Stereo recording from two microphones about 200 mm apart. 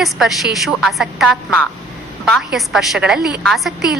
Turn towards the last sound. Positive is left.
turn(degrees=0)  # may be behind; listen again after turning